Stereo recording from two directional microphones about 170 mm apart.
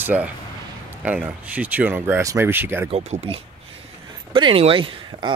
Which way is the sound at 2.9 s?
40° right (ahead or behind).